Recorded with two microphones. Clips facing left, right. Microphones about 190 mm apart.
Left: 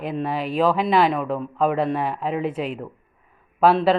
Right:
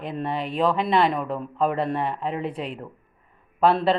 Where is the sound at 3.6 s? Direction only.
5° left (ahead or behind).